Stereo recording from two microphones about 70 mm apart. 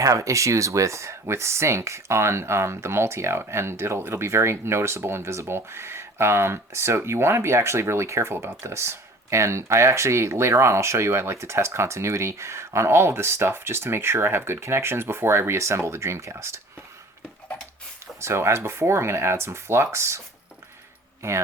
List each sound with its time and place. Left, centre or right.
0.0 s speech: right
18.2 s speech: right